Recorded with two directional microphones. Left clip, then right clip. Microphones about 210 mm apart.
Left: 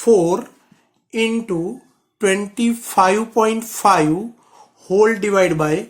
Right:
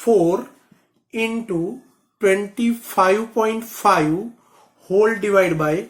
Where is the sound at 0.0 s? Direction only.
45° left (ahead or behind).